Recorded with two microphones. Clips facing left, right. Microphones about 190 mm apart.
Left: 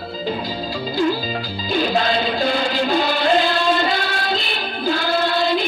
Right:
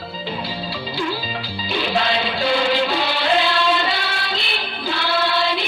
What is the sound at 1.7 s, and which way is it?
Music, 45° left (ahead or behind).